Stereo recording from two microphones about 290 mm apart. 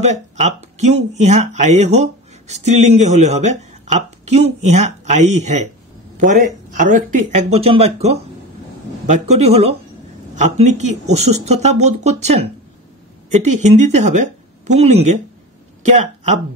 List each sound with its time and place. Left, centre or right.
0.0 s speech: right
13.6 s speech: right